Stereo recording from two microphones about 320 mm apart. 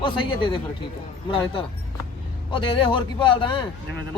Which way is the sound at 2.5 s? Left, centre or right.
Centre.